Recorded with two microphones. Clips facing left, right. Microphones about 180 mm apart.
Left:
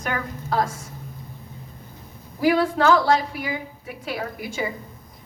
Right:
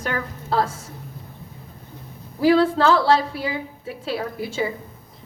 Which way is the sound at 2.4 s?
30° right (ahead or behind).